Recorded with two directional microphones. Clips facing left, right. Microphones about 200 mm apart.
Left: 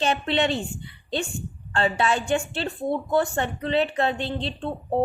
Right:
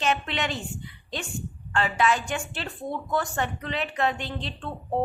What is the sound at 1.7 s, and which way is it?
A woman's voice, 30° left (ahead or behind).